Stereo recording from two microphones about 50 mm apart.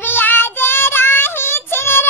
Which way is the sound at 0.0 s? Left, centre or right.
Left.